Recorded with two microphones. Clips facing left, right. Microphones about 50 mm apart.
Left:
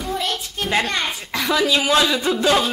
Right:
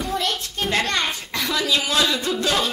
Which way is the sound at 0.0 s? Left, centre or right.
Centre.